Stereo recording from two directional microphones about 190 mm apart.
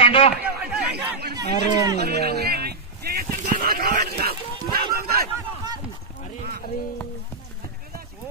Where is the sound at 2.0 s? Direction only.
55° right (ahead or behind).